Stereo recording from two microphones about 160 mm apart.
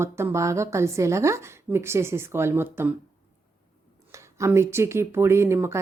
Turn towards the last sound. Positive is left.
turn(degrees=-15)  # may be behind; listen again after turning